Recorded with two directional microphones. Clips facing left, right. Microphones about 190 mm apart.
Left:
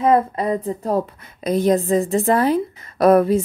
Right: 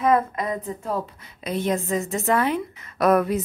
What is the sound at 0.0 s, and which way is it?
A woman's voice, 30° left (ahead or behind).